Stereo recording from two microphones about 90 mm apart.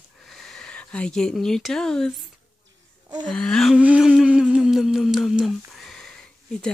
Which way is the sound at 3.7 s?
10° right (ahead or behind).